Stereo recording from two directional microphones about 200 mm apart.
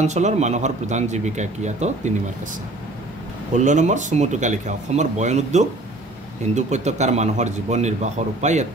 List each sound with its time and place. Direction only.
0.0 s a man's voice: 35° right (ahead or behind)
3.5 s a man's voice: 40° right (ahead or behind)